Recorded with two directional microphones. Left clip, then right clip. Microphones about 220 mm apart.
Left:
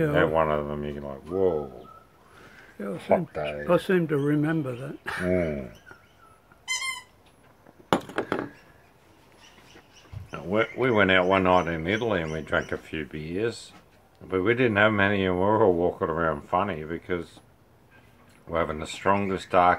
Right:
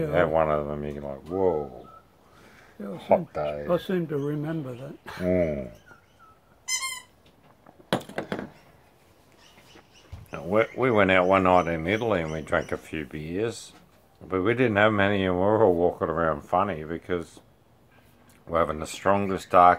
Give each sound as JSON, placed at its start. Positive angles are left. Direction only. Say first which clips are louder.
{"t": 0.1, "sound": "speech", "louder": "even", "side_deg": -15}
{"t": 3.1, "sound": "speech", "louder": "right 2 dB", "side_deg": -20}
{"t": 3.6, "sound": "speech", "louder": "left 8 dB", "side_deg": 45}
{"t": 5.2, "sound": "speech", "louder": "right 2 dB", "side_deg": -20}
{"t": 10.3, "sound": "speech", "louder": "right 2 dB", "side_deg": -20}
{"t": 18.5, "sound": "speech", "louder": "right 2 dB", "side_deg": -20}